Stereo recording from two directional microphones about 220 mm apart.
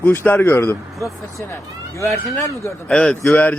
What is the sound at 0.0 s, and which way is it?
Speech, 10° left (ahead or behind).